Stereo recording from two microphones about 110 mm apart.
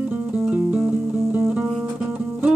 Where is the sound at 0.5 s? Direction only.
15° right (ahead or behind).